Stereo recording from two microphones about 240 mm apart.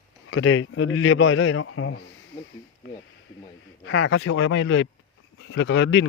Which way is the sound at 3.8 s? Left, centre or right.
Left.